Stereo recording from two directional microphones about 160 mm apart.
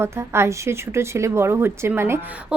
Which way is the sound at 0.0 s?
15° right (ahead or behind).